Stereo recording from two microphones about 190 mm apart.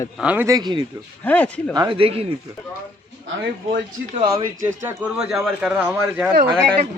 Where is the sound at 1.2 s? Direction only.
10° left (ahead or behind).